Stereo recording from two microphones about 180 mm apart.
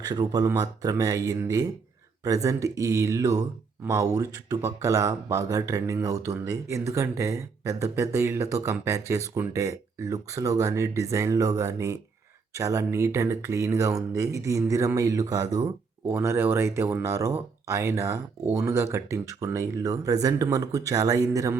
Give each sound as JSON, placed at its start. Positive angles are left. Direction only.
{"t": 0.0, "sound": "speech", "side_deg": -20}